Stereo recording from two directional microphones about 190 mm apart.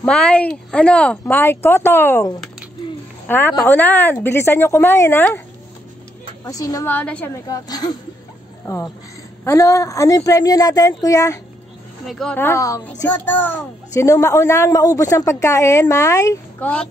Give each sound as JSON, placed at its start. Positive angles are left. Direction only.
{"t": 0.0, "sound": "a child's voice", "side_deg": 5}
{"t": 6.4, "sound": "a child's voice", "side_deg": 20}
{"t": 7.4, "sound": "a woman's voice", "side_deg": 20}
{"t": 12.1, "sound": "a child's voice", "side_deg": 5}